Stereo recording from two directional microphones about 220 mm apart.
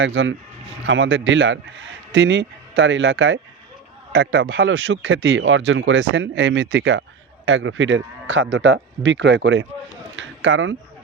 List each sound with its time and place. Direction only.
0.0 s a man's voice: 55° right (ahead or behind)
4.1 s a man's voice: 45° right (ahead or behind)
4.5 s a man's voice: 65° right (ahead or behind)